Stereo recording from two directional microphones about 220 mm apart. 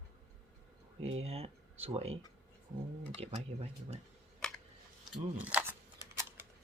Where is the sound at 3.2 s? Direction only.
30° right (ahead or behind).